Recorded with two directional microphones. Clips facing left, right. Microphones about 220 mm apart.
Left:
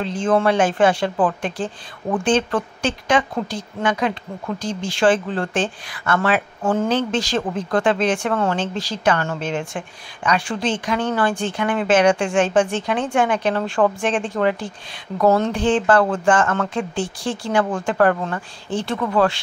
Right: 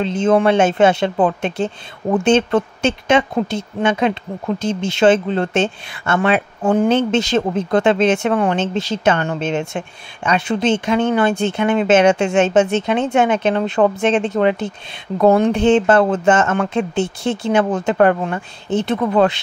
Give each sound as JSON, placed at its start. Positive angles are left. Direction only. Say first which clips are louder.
{"t": 0.0, "sound": "speech", "louder": "right 4 dB", "side_deg": -25}